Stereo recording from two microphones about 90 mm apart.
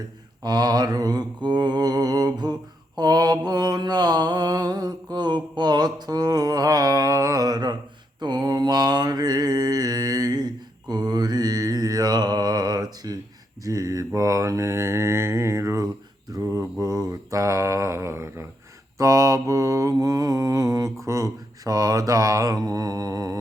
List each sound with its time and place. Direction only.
0.4 s mantra: 50° right (ahead or behind)